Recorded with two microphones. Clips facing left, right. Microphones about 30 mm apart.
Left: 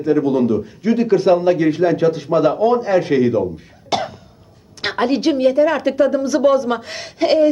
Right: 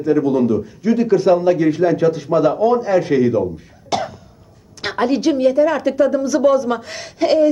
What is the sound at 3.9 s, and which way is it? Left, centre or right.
Cough, left.